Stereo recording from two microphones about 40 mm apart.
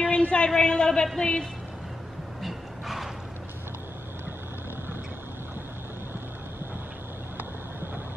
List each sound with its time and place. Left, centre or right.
0.0 s a sound: left
0.6 s a man's voice: left
2.4 s vehicle: centre